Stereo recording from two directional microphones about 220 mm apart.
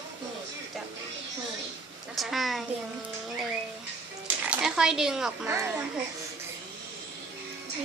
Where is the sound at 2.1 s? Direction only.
Centre (ahead or behind).